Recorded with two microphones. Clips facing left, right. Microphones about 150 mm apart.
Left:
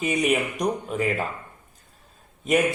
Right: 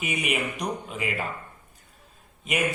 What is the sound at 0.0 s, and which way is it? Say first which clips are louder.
Speech: left 7 dB; 40° left (ahead or behind).